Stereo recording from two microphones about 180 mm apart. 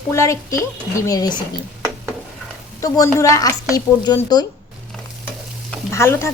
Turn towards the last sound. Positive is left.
turn(degrees=15)  # may be behind; listen again after turning